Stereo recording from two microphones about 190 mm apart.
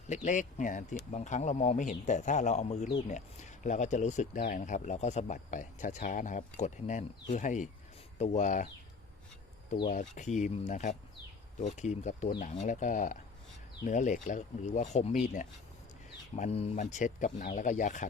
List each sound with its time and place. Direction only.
0.1 s speech: 40° left (ahead or behind)
9.9 s speech: 40° left (ahead or behind)